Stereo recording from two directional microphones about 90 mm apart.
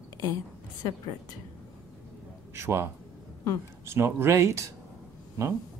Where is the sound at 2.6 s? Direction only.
30° right (ahead or behind).